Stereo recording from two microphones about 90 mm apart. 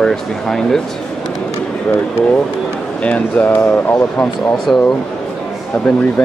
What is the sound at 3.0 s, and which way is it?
Speech, 15° left (ahead or behind).